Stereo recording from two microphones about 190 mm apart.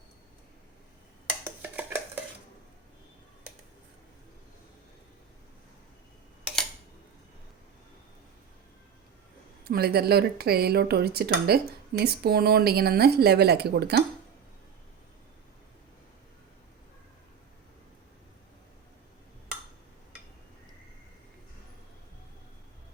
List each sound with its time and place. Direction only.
1.7 s dishes: 10° right (ahead or behind)
9.6 s speech: 55° right (ahead or behind)